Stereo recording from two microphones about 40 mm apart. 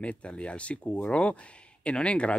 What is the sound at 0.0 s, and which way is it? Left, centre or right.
Speech, left.